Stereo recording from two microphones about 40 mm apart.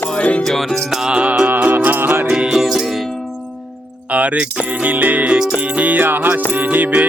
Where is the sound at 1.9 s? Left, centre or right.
Right.